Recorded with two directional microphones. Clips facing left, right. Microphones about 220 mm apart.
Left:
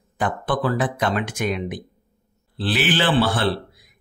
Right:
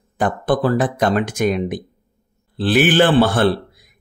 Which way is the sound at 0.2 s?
40° right (ahead or behind).